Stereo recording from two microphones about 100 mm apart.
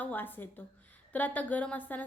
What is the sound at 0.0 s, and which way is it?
A woman's voice, 20° left (ahead or behind).